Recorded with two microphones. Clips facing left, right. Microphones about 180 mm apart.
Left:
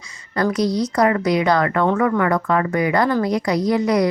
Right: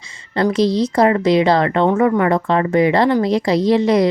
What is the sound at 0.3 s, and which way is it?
A woman's voice, 25° right (ahead or behind).